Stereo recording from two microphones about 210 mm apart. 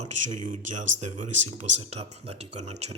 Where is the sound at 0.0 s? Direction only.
35° right (ahead or behind).